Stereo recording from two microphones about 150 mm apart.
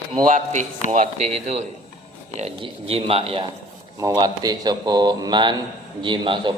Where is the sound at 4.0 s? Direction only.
25° right (ahead or behind).